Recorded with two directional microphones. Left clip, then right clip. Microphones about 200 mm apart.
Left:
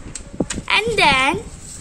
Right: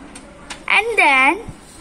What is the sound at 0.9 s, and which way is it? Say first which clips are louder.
Speech: right 2 dB; 15° left (ahead or behind).